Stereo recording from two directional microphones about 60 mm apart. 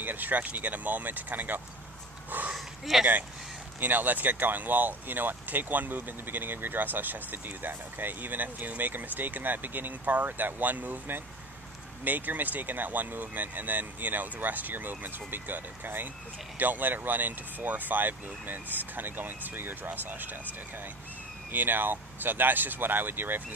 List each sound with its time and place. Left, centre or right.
0.0 s speech: right
2.5 s speech: centre
3.8 s speech: right
21.5 s speech: right